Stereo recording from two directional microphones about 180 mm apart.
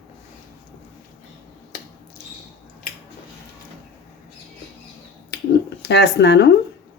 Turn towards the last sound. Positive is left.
turn(degrees=70)  # may be behind; listen again after turning